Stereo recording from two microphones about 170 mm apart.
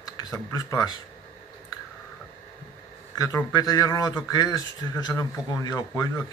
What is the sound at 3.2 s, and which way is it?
Speech, 20° left (ahead or behind).